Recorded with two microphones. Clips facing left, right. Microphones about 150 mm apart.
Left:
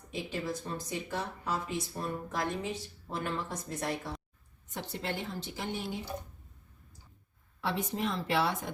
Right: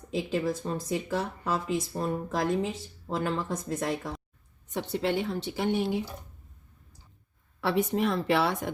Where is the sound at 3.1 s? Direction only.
90° right.